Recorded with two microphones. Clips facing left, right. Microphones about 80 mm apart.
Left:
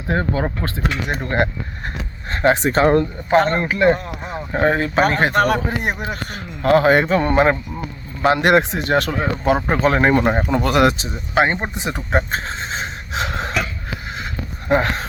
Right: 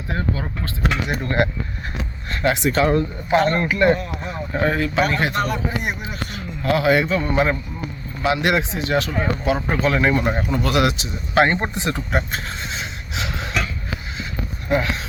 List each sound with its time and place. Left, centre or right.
0.1 s a man's voice: left
1.1 s a man's voice: left
5.5 s a man's voice: left
11.3 s speech: centre
12.3 s a sound: left
14.7 s a man's voice: left